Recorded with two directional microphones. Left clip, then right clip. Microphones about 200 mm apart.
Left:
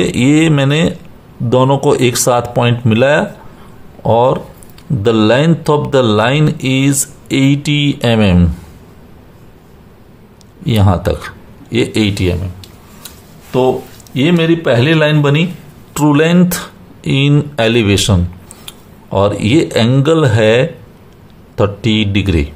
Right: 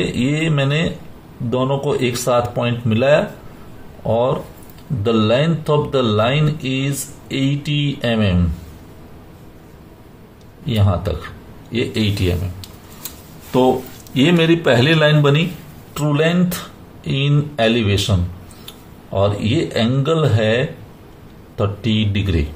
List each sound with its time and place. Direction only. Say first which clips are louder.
0.0 s speech: left 9 dB; 40° left (ahead or behind)
10.6 s speech: left 7 dB; 40° left (ahead or behind)
13.5 s a man's voice: left 2 dB; 15° left (ahead or behind)
15.9 s speech: left 7 dB; 40° left (ahead or behind)